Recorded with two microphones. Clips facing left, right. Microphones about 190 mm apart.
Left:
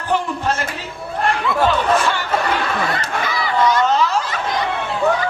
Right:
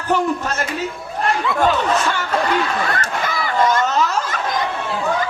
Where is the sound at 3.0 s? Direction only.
50° right (ahead or behind).